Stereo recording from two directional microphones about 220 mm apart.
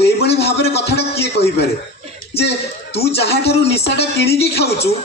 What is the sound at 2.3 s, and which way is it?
A man's voice, 25° left (ahead or behind).